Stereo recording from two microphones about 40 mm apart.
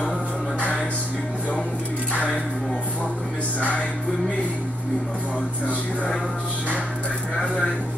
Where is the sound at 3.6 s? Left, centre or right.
Left.